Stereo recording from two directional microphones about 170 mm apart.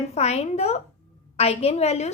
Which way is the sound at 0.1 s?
40° left (ahead or behind).